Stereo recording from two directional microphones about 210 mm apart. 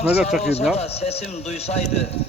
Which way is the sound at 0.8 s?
30° left (ahead or behind).